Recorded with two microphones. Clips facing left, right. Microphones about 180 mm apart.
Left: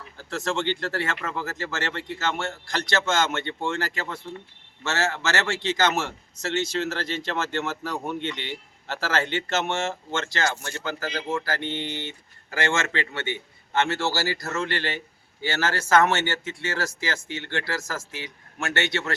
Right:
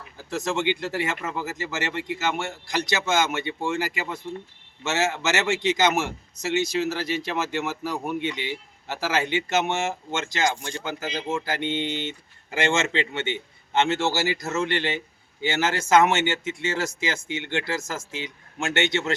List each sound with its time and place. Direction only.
0.2 s a man's voice: 15° right (ahead or behind)